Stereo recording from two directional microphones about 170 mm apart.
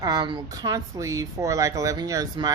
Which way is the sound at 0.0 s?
25° right (ahead or behind).